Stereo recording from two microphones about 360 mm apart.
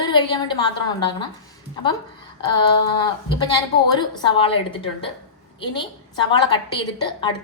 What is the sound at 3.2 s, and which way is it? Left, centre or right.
A woman's voice, centre.